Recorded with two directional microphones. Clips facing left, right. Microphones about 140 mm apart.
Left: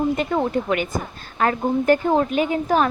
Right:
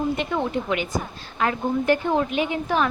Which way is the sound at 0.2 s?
40° left (ahead or behind).